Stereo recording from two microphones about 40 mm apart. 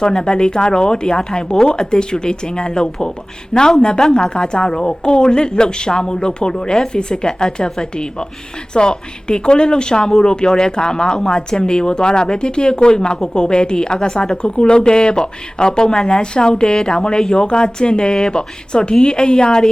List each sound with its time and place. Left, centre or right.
0.0 s a woman's voice: centre
13.4 s a woman's voice: left